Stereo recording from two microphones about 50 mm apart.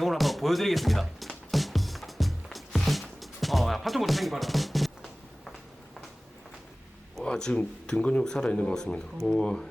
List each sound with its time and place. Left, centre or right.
0.0 s speech: centre
1.5 s music: centre
7.3 s speech: centre